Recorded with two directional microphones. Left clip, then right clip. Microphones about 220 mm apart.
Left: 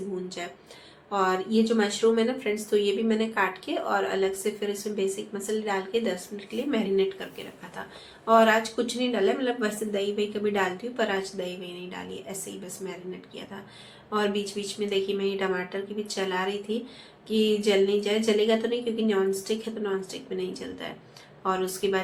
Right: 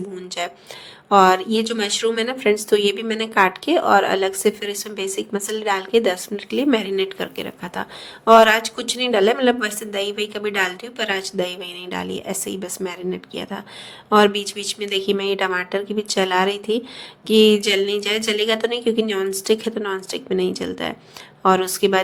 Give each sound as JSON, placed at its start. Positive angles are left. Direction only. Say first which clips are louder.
{"t": 0.4, "sound": "speech", "louder": "right 10 dB", "side_deg": -50}